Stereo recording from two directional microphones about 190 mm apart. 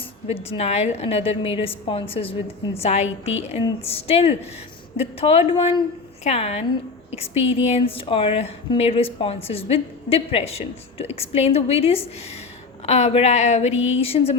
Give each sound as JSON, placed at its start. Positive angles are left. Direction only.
{"t": 0.3, "sound": "a woman's voice", "side_deg": 30}